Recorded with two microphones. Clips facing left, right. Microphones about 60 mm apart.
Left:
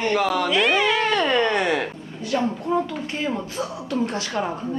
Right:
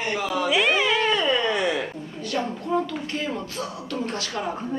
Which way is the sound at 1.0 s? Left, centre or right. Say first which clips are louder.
Left 2 dB; left.